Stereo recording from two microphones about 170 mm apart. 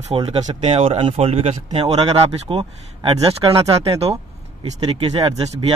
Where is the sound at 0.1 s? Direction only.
30° right (ahead or behind).